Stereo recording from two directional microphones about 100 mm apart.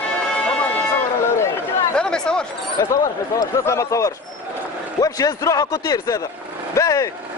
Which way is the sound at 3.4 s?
30° left (ahead or behind).